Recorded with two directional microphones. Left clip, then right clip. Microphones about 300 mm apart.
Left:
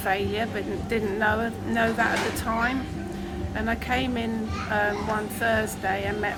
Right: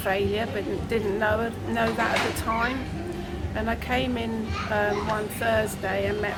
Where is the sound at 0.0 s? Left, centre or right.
Centre.